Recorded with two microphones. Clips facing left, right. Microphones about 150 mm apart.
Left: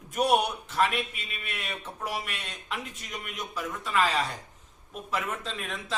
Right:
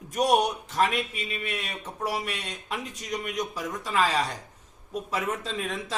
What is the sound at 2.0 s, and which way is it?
A man's voice, 40° right (ahead or behind).